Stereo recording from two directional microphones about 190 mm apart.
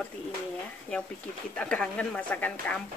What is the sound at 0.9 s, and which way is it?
Speech, 5° left (ahead or behind).